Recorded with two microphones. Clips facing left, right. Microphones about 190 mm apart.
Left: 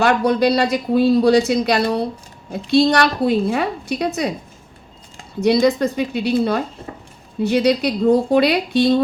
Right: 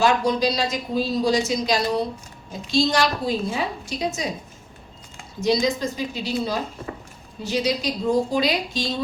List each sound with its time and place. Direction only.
0.0 s speech: 60° left (ahead or behind)
5.4 s speech: 60° left (ahead or behind)